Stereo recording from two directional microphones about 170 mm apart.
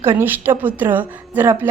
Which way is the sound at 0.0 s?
15° right (ahead or behind).